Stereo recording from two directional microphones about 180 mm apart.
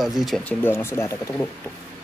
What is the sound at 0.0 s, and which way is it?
Speech, centre (ahead or behind).